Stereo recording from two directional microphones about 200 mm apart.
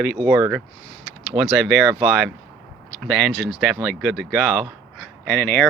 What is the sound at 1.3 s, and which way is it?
Speech, centre (ahead or behind).